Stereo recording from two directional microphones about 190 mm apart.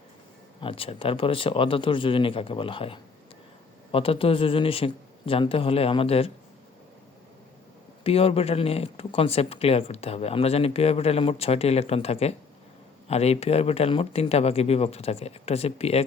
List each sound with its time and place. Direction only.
0.6 s speech: 30° left (ahead or behind)
8.0 s speech: 30° left (ahead or behind)